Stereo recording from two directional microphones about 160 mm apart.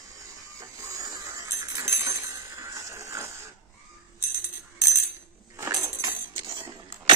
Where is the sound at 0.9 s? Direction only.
20° right (ahead or behind).